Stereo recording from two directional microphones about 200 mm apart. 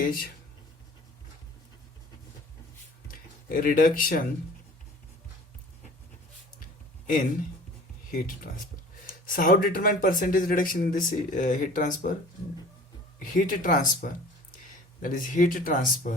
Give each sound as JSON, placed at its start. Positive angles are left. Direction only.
{"t": 0.0, "sound": "speech", "side_deg": 45}
{"t": 3.1, "sound": "speech", "side_deg": 45}
{"t": 8.4, "sound": "speech", "side_deg": 45}
{"t": 13.3, "sound": "speech", "side_deg": 40}